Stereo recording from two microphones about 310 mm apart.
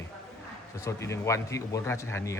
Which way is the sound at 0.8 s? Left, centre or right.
Centre.